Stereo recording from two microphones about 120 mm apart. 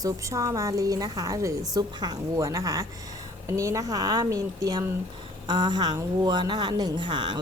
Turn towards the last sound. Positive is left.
turn(degrees=-40)  # may be behind; listen again after turning